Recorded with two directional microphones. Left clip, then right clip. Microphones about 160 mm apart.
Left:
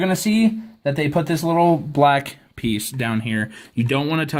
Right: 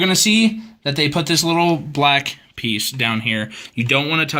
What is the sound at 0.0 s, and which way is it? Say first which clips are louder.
Speech: right 5 dB; 40° left (ahead or behind).